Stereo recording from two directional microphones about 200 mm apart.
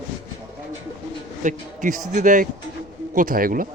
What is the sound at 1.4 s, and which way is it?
A man's voice, 40° right (ahead or behind).